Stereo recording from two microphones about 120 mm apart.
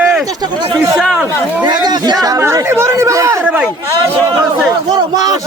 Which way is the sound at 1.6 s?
35° right (ahead or behind).